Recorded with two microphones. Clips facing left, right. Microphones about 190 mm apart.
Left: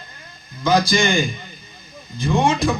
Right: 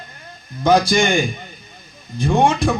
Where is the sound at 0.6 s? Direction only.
60° right (ahead or behind).